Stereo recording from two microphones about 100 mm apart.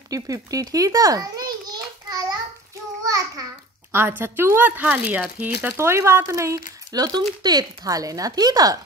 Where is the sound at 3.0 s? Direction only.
35° right (ahead or behind).